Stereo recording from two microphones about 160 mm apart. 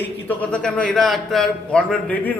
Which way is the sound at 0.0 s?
10° left (ahead or behind).